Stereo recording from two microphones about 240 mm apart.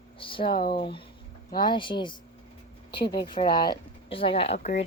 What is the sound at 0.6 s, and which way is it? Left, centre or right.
Speech, left.